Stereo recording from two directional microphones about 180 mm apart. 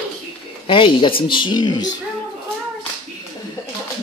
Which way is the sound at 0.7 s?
30° left (ahead or behind).